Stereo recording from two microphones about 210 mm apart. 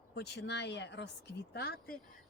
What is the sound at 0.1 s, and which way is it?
Speech, 55° left (ahead or behind).